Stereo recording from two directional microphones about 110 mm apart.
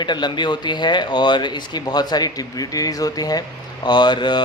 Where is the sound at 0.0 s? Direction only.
40° left (ahead or behind).